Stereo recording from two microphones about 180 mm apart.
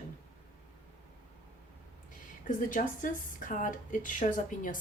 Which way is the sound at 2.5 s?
45° left (ahead or behind).